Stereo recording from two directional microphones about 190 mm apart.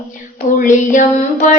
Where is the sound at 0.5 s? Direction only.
45° left (ahead or behind).